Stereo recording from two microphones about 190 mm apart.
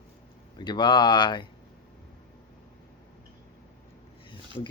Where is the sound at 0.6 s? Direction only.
25° left (ahead or behind).